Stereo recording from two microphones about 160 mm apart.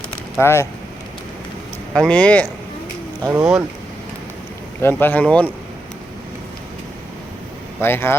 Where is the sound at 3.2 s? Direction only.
20° right (ahead or behind).